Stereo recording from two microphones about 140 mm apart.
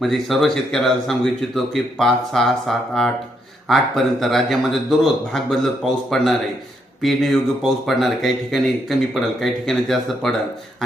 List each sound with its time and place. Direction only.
0.0 s speech: centre (ahead or behind)